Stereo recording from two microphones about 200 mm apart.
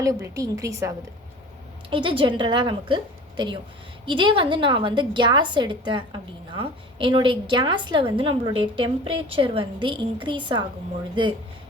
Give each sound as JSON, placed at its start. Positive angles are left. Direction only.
{"t": 0.0, "sound": "a woman's voice", "side_deg": -15}